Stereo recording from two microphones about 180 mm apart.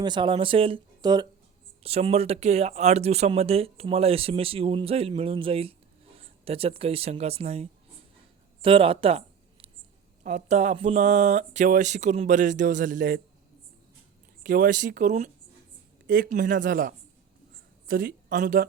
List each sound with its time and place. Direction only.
0.0 s speech: 25° right (ahead or behind)
1.8 s speech: 35° right (ahead or behind); by 13.2 s 50° right (ahead or behind)
14.4 s a woman's voice: 50° right (ahead or behind)
16.0 s a woman's voice: 55° right (ahead or behind)